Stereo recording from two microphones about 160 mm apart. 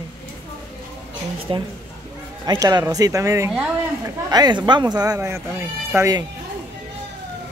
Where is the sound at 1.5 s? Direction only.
30° right (ahead or behind).